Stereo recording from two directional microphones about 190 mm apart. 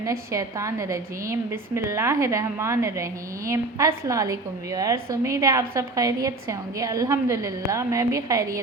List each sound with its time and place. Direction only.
0.0 s a woman's voice: 15° right (ahead or behind)